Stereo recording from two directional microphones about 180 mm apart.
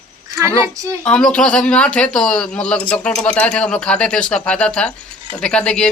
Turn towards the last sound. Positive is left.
turn(degrees=5)  # may be behind; listen again after turning